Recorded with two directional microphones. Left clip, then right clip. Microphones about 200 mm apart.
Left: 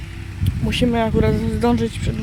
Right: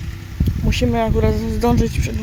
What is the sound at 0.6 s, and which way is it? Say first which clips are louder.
Speech: even; 5° left (ahead or behind).